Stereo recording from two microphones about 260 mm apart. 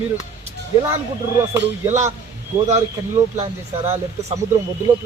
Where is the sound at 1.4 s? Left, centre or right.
Centre.